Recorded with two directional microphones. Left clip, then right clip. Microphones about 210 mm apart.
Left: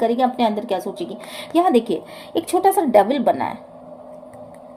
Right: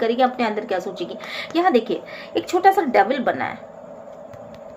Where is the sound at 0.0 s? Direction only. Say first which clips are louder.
Left 1 dB; 35° left (ahead or behind).